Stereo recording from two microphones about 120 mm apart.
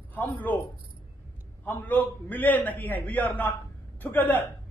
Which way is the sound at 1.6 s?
15° left (ahead or behind).